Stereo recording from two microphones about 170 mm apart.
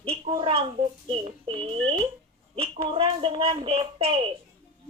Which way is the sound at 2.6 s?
30° right (ahead or behind).